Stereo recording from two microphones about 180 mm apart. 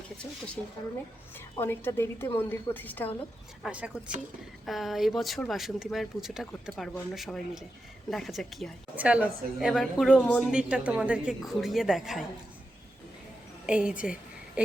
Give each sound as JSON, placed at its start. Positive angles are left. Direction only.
{"t": 0.2, "sound": "a woman's voice", "side_deg": 5}
{"t": 3.6, "sound": "speech", "side_deg": -5}
{"t": 10.4, "sound": "speech", "side_deg": -5}
{"t": 13.7, "sound": "a woman's voice", "side_deg": -5}